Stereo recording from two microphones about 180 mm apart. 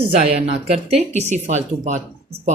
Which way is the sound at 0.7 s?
35° right (ahead or behind).